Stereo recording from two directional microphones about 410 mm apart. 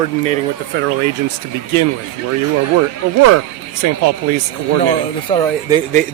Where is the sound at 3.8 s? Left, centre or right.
Right.